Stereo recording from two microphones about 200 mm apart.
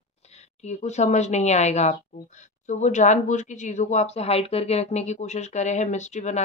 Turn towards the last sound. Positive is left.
turn(degrees=35)  # may be behind; listen again after turning